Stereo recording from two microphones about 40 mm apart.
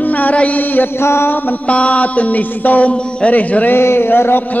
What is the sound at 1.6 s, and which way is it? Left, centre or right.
Music, left.